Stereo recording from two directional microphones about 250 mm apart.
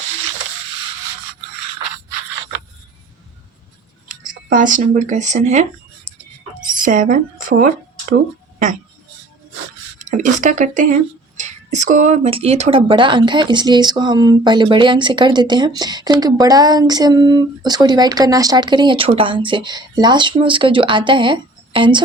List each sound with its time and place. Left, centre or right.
4.5 s speech: right
6.7 s speech: right
10.0 s speech: right